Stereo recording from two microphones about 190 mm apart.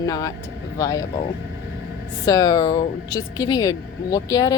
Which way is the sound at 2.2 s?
20° left (ahead or behind).